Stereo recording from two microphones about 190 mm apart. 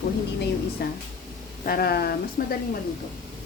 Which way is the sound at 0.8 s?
60° left (ahead or behind).